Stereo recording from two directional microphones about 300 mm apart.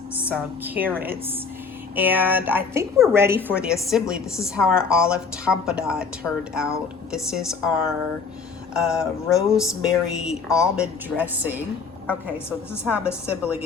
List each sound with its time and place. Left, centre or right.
0.2 s a woman's voice: centre
0.9 s speech: right
2.0 s a woman's voice: centre
8.7 s a woman's voice: centre
12.0 s a woman's voice: centre
12.8 s a woman's voice: centre